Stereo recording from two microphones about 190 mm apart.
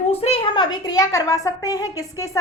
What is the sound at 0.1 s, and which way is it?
A woman's voice, 30° left (ahead or behind).